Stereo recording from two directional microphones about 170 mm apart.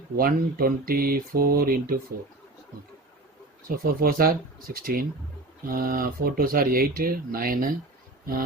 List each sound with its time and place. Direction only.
0.2 s speech: 60° right (ahead or behind)
4.0 s speech: 60° right (ahead or behind)